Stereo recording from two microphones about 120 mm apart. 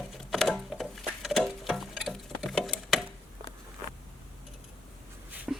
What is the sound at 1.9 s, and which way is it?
Tick-tock, 5° right (ahead or behind).